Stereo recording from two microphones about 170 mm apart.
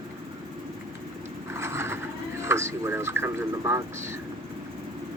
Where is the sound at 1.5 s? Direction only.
15° right (ahead or behind).